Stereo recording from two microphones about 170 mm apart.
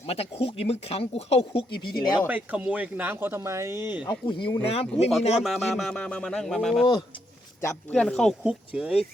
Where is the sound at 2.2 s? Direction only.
10° right (ahead or behind).